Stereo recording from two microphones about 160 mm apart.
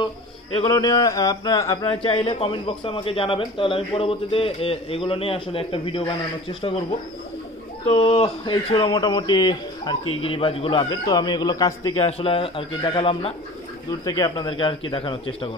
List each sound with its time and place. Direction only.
0.7 s speech: 25° left (ahead or behind)
1.9 s a man's voice: 35° left (ahead or behind)
7.9 s speech: 35° left (ahead or behind)
12.0 s a man's voice: 35° left (ahead or behind)